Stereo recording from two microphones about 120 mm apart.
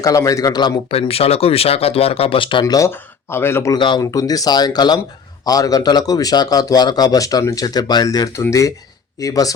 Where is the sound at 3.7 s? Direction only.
40° left (ahead or behind).